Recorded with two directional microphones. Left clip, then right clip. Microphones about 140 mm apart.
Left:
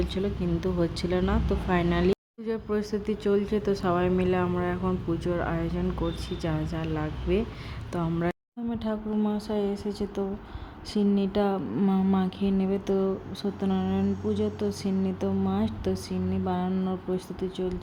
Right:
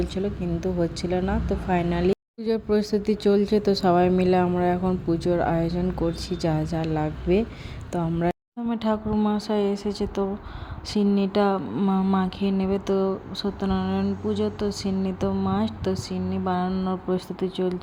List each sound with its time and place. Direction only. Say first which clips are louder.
0.0 s speech: right 2 dB; 5° right (ahead or behind)
2.4 s speech: right 6 dB; 30° right (ahead or behind)
7.9 s speech: right 4 dB; 15° right (ahead or behind)
11.8 s speech: right 3 dB; centre (ahead or behind); by 17.7 s 20° right (ahead or behind)